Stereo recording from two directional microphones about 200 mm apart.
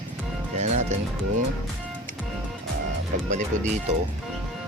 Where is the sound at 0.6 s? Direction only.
35° right (ahead or behind).